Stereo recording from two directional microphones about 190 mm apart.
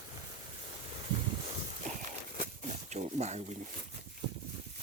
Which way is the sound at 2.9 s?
35° right (ahead or behind).